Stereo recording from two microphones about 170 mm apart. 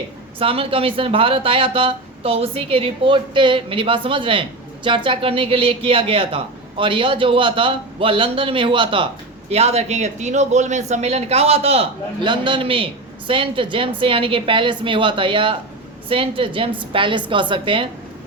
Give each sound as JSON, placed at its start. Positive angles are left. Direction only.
{"t": 0.3, "sound": "a woman's voice", "side_deg": -30}